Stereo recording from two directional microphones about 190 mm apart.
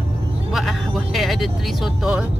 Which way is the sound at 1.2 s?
Centre (ahead or behind).